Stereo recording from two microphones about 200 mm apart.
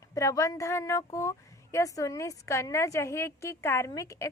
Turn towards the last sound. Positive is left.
turn(degrees=15)  # may be behind; listen again after turning